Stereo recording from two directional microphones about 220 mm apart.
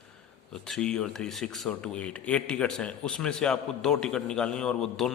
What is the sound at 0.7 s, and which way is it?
Speech, 5° left (ahead or behind).